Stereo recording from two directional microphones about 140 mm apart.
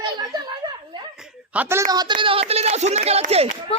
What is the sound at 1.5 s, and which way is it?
Speech, 15° right (ahead or behind).